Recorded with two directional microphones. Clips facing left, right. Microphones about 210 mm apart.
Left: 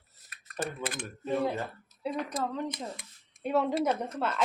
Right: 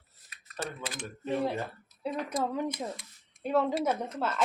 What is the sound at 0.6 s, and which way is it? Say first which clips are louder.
Speech: left 3 dB; 55° left (ahead or behind).